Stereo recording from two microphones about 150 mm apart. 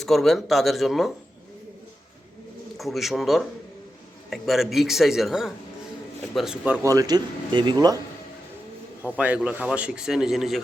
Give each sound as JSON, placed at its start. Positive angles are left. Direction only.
{"t": 0.0, "sound": "a man's voice", "side_deg": 0}
{"t": 2.7, "sound": "a man's voice", "side_deg": 0}
{"t": 6.8, "sound": "speech", "side_deg": -25}
{"t": 9.1, "sound": "a man's voice", "side_deg": -10}